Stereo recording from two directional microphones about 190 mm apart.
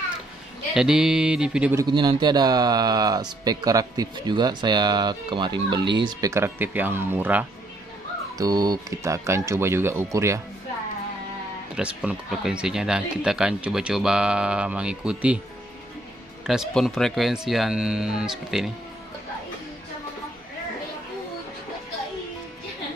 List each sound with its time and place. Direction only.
0.7 s speech: 5° right (ahead or behind)
1.9 s speech: 25° right (ahead or behind)
11.7 s speech: 5° right (ahead or behind)
16.4 s speech: centre (ahead or behind)